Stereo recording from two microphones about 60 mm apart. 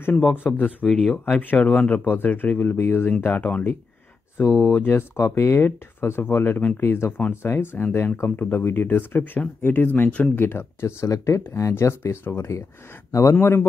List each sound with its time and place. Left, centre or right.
0.0 s speech: left
1.5 s speech: left
4.4 s speech: left
5.2 s speech: left
7.1 s speech: left
7.4 s speech: left
10.1 s speech: left
10.4 s speech: left
11.1 s speech: left
12.1 s speech: left
13.1 s speech: left